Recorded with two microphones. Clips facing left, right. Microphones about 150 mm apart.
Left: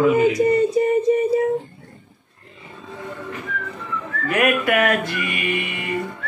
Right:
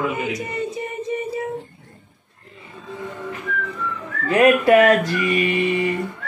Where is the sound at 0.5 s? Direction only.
35° left (ahead or behind).